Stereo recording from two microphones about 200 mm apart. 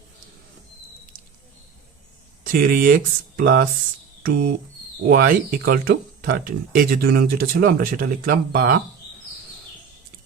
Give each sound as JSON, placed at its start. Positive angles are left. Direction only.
{"t": 2.4, "sound": "speech", "side_deg": -45}